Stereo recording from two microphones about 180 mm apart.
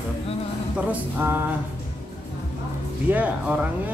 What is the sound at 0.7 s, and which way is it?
Speech, 10° right (ahead or behind).